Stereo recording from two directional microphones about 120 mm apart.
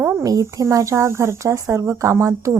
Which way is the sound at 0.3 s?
30° right (ahead or behind).